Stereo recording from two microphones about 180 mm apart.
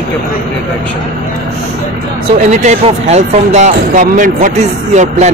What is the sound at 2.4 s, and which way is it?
Speech, 40° right (ahead or behind).